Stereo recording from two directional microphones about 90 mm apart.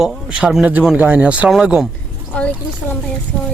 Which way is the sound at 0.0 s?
10° right (ahead or behind).